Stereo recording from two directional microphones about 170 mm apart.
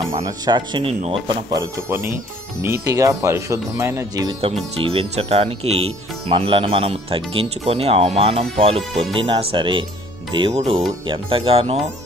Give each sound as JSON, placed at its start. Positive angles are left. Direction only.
{"t": 0.2, "sound": "speech", "side_deg": -25}
{"t": 1.5, "sound": "speech", "side_deg": -15}
{"t": 4.8, "sound": "speech", "side_deg": -35}